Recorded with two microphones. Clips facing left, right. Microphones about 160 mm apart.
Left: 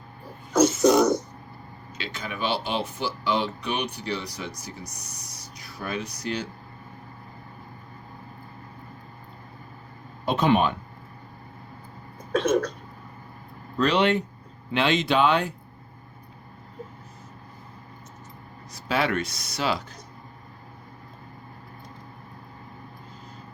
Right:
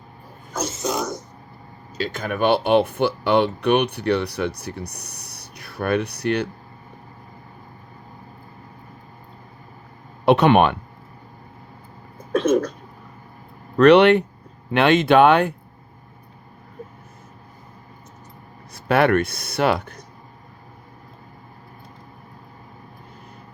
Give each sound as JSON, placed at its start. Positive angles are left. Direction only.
{"t": 0.5, "sound": "a sound", "side_deg": 70}
{"t": 2.0, "sound": "speech", "side_deg": -45}
{"t": 10.2, "sound": "speech", "side_deg": -70}
{"t": 13.7, "sound": "speech", "side_deg": -65}
{"t": 18.7, "sound": "speech", "side_deg": -60}